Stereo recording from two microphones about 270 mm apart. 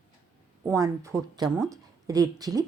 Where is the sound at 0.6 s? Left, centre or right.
Centre.